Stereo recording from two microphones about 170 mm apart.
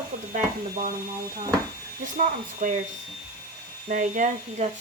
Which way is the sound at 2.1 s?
50° right (ahead or behind).